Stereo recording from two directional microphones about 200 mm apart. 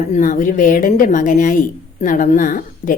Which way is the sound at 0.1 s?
40° left (ahead or behind).